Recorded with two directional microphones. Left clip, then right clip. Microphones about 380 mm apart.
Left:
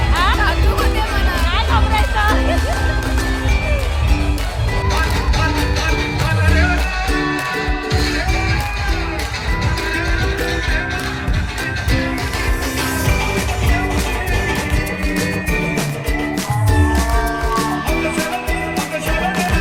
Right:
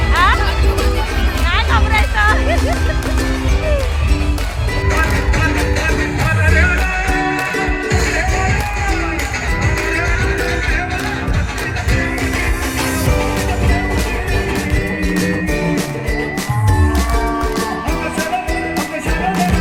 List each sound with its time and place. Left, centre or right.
0.2 s music: centre
1.5 s music: centre
6.4 s music: centre